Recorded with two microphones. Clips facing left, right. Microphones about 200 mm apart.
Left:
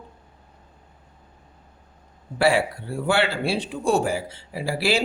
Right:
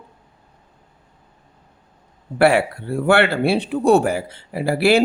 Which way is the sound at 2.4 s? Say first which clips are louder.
Right 5 dB; 60° right (ahead or behind).